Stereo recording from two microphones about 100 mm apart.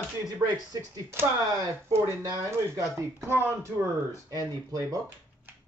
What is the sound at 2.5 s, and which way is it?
Speech, 30° right (ahead or behind).